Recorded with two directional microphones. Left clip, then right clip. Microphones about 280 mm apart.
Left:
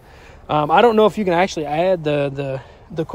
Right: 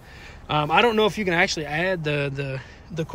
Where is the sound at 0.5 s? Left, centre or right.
Centre.